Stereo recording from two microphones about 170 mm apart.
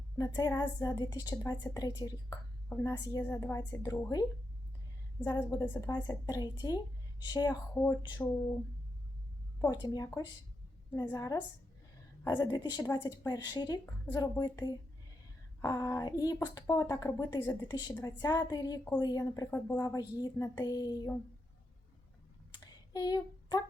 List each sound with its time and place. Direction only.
0.3 s a woman's voice: 25° left (ahead or behind)
8.2 s speech: 10° left (ahead or behind)
9.6 s speech: 25° left (ahead or behind)
22.5 s a sound: 25° left (ahead or behind)